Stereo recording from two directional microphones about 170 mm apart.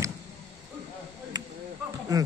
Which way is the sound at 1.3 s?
25° right (ahead or behind).